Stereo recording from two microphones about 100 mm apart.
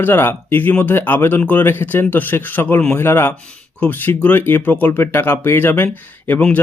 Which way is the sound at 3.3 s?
10° left (ahead or behind).